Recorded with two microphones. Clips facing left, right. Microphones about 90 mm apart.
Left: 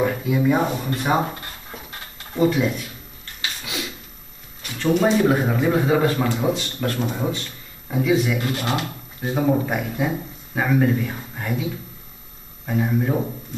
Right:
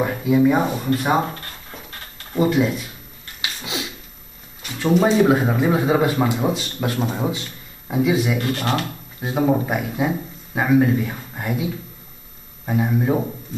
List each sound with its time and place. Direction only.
0.0 s a man's voice: 5° right (ahead or behind)
1.4 s a sound: 15° left (ahead or behind)
2.3 s speech: 5° right (ahead or behind)
3.3 s a sound: 20° right (ahead or behind)
4.9 s a man's voice: centre (ahead or behind)
8.4 s speech: 5° left (ahead or behind)
9.2 s speech: 10° right (ahead or behind)
12.6 s a man's voice: 15° right (ahead or behind)